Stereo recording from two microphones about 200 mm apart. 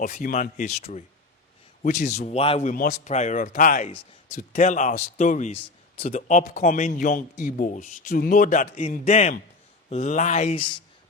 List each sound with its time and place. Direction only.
0.0 s speech: 45° left (ahead or behind)
2.6 s speech: 40° left (ahead or behind)